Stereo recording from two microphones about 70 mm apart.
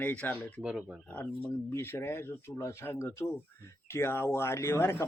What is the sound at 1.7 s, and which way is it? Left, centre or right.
Speech, left.